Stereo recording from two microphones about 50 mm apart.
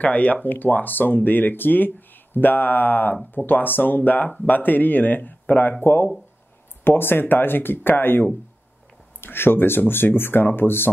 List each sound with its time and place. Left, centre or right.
0.0 s speech: left